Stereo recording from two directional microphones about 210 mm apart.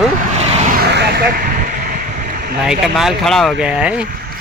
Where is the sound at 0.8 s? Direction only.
50° right (ahead or behind).